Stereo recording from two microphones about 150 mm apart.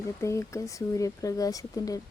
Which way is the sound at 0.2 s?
20° left (ahead or behind).